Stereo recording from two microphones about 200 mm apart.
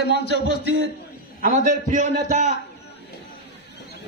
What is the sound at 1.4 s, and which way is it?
A man's voice, 40° right (ahead or behind).